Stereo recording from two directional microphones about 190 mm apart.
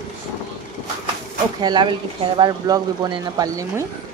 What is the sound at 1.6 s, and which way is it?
Speech, 25° right (ahead or behind).